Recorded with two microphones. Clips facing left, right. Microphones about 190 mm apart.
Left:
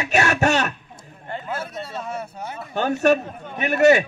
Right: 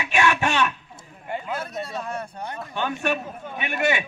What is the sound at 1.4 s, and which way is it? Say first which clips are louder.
A man's voice: even; 5° left (ahead or behind).